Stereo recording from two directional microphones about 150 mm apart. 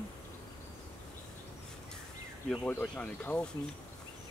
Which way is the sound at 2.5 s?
10° left (ahead or behind).